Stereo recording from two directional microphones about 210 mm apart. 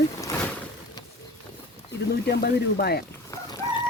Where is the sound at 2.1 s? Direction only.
50° left (ahead or behind).